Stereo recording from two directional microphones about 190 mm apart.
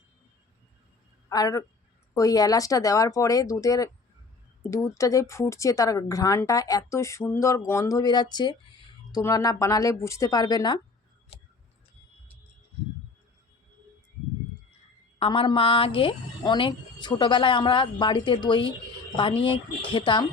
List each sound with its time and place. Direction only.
1.3 s a woman's voice: 20° left (ahead or behind)
15.2 s a woman's voice: 25° left (ahead or behind)